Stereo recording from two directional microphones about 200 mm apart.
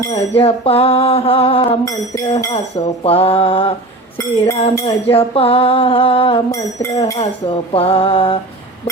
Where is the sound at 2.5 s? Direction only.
30° left (ahead or behind).